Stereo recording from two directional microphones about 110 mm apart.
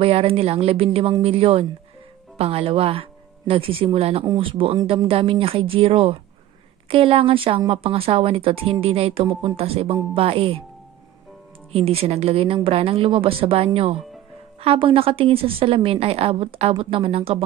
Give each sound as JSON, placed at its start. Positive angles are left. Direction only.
{"t": 0.0, "sound": "a woman's voice", "side_deg": -60}
{"t": 11.7, "sound": "a woman's voice", "side_deg": -65}